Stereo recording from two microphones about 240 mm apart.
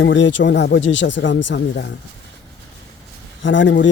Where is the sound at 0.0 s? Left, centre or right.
Left.